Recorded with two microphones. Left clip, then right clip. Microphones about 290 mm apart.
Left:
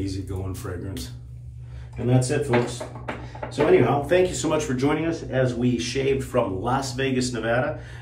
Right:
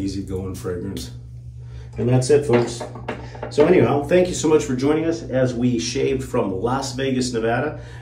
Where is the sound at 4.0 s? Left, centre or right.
Centre.